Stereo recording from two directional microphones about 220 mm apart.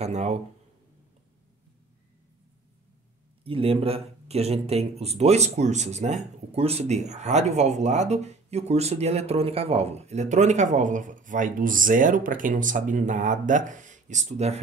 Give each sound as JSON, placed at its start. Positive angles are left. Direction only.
{"t": 0.0, "sound": "speech", "side_deg": -30}
{"t": 3.4, "sound": "speech", "side_deg": -25}